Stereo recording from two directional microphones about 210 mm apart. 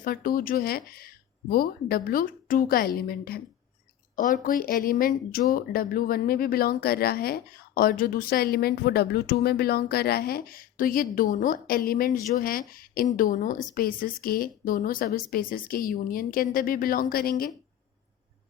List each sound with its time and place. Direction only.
0.0 s speech: 45° left (ahead or behind)